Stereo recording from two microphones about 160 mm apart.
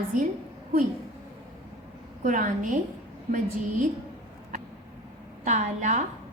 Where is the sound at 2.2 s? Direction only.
55° right (ahead or behind).